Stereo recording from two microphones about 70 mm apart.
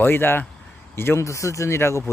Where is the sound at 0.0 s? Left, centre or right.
Left.